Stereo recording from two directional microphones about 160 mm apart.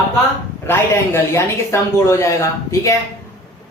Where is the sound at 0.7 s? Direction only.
15° left (ahead or behind).